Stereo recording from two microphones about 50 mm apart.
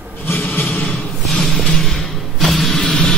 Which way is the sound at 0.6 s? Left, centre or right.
Left.